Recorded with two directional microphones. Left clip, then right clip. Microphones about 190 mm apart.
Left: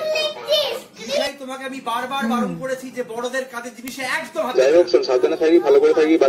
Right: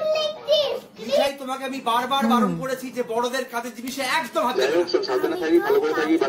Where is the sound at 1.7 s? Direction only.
30° right (ahead or behind).